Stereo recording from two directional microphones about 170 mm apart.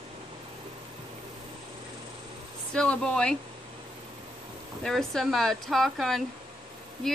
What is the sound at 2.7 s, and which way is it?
Speech, 5° left (ahead or behind).